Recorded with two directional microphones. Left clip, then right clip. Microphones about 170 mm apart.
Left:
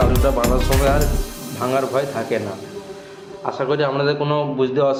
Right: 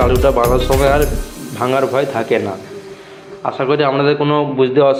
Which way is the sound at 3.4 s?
15° right (ahead or behind).